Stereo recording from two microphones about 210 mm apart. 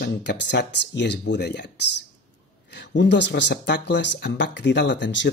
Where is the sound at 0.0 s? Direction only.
55° left (ahead or behind).